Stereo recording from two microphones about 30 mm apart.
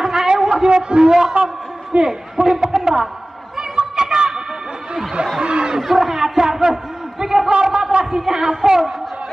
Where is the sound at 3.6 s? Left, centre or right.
Right.